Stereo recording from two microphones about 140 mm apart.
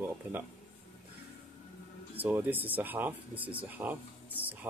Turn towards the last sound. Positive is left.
turn(degrees=-10)  # may be behind; listen again after turning